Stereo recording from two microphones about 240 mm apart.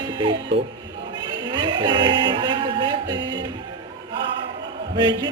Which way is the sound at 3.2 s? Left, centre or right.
Centre.